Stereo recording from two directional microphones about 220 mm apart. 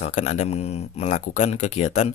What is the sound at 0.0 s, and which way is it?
Speech, 30° left (ahead or behind).